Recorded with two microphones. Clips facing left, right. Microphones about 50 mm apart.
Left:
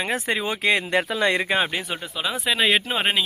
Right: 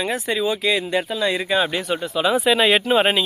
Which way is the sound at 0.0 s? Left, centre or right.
Left.